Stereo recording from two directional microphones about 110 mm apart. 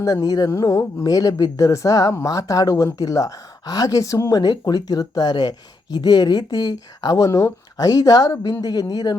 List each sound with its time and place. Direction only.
0.0 s speech: 35° left (ahead or behind)